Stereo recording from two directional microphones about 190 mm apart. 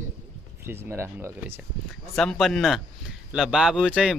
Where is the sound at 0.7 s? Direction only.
15° right (ahead or behind).